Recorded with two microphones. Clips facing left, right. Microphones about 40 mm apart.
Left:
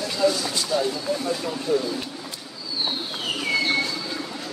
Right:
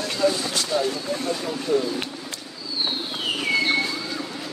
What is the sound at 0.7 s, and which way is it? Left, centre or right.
Speech, right.